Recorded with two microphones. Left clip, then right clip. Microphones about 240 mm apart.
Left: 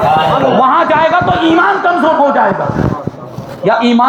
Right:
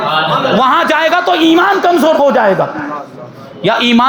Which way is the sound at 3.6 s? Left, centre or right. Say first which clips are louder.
Even; right.